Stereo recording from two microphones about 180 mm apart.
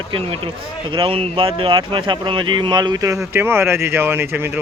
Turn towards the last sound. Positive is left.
turn(degrees=-10)  # may be behind; listen again after turning